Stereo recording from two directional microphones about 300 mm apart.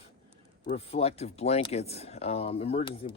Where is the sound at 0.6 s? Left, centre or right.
Left.